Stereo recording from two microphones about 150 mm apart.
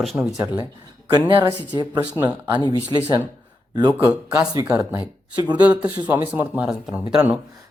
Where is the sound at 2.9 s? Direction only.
25° right (ahead or behind).